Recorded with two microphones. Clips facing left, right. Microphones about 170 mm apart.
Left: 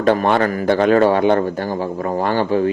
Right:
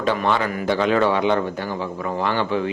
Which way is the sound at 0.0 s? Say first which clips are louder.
Left 6 dB; 50° left (ahead or behind).